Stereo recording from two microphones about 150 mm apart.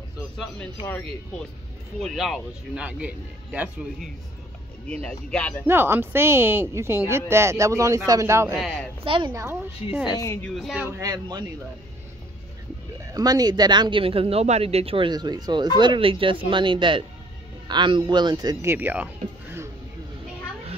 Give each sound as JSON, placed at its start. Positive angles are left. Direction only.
{"t": 2.0, "sound": "speech", "side_deg": 0}
{"t": 5.0, "sound": "speech", "side_deg": 10}
{"t": 5.7, "sound": "speech", "side_deg": -15}
{"t": 9.0, "sound": "speech", "side_deg": -35}
{"t": 9.3, "sound": "speech", "side_deg": -15}
{"t": 10.0, "sound": "speech", "side_deg": 20}
{"t": 10.4, "sound": "speech", "side_deg": 0}
{"t": 10.9, "sound": "speech", "side_deg": -25}
{"t": 13.0, "sound": "speech", "side_deg": -25}